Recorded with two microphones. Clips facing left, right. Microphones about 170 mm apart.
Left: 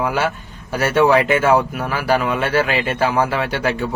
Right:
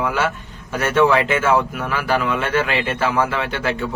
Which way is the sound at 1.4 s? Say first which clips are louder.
Left 2 dB; 35° left (ahead or behind).